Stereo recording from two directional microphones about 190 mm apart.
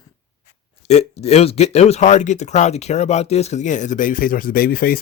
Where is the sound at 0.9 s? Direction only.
35° left (ahead or behind).